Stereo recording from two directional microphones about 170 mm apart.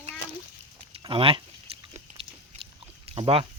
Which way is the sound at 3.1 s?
35° right (ahead or behind).